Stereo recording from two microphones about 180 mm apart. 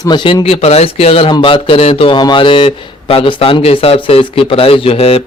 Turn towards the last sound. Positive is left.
turn(degrees=30)  # may be behind; listen again after turning